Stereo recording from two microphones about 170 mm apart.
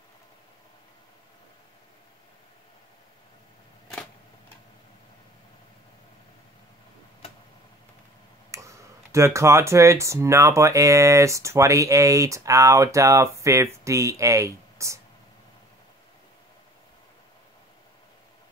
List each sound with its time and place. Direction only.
8.5 s speech: 15° right (ahead or behind)